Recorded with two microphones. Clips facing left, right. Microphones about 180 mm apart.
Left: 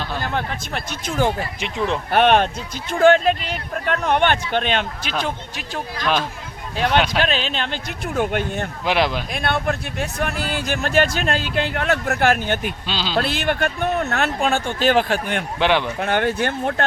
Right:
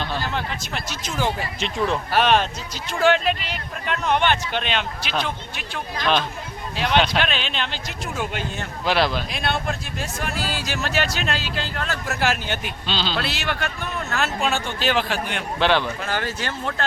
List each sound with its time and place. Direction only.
0.2 s speech: 55° left (ahead or behind)
1.5 s speech: 15° left (ahead or behind)
2.0 s speech: 55° left (ahead or behind)
8.8 s speech: 15° left (ahead or behind)
9.3 s speech: 55° left (ahead or behind)
12.9 s speech: 10° left (ahead or behind)
13.1 s speech: 50° left (ahead or behind)
15.5 s speech: 15° left (ahead or behind)
16.0 s speech: 60° left (ahead or behind)